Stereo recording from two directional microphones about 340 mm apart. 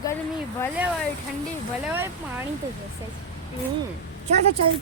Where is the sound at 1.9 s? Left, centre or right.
Centre.